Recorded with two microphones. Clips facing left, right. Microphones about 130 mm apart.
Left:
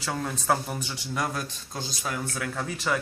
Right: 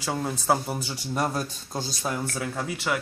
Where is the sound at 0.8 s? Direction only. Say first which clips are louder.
Right 3 dB; 35° right (ahead or behind).